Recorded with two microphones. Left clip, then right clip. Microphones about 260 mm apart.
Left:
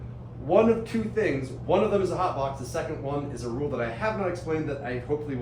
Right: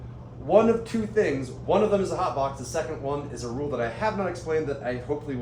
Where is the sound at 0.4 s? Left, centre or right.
Right.